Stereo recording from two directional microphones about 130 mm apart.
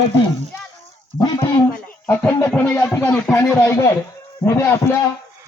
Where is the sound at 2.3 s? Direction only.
20° left (ahead or behind).